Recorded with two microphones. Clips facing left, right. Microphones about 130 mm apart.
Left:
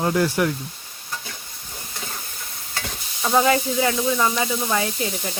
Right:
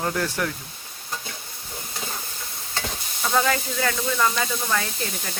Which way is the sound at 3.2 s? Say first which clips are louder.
Left 4 dB; 20° left (ahead or behind).